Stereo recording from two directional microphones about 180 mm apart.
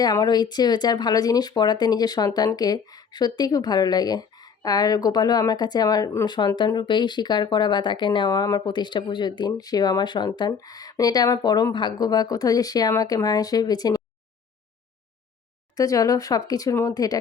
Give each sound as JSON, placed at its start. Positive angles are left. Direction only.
{"t": 0.0, "sound": "speech", "side_deg": 20}
{"t": 15.7, "sound": "speech", "side_deg": 20}